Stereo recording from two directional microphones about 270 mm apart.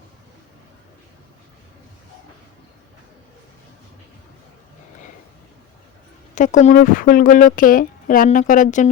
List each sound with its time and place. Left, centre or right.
6.3 s speech: left